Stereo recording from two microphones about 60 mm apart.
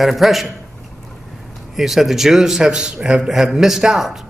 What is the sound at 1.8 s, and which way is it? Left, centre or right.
A man's voice, centre.